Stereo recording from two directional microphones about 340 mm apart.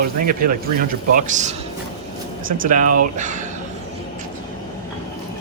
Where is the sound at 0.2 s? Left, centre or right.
Right.